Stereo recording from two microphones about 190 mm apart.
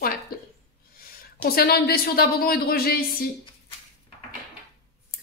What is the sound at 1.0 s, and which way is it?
Speech, 50° left (ahead or behind).